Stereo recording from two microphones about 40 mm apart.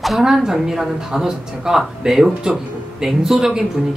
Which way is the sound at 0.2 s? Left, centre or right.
Centre.